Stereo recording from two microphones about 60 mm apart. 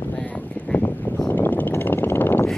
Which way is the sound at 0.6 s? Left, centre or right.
Left.